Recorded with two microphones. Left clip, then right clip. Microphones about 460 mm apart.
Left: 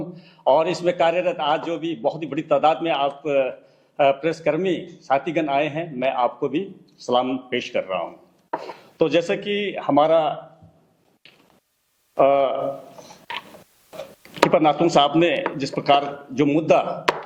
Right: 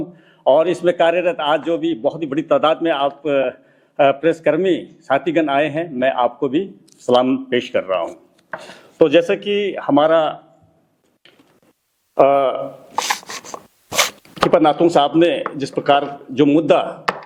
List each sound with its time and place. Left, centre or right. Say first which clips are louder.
0.4 s a man's voice: right 4 dB; centre
9.0 s a man's voice: right 6 dB; centre
12.1 s a man's voice: right 4 dB; centre
14.5 s a man's voice: right 5 dB; centre